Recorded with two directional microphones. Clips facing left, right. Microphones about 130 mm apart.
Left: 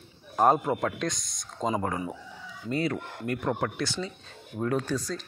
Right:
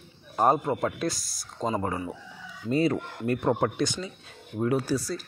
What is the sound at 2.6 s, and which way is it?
Speech, 25° right (ahead or behind).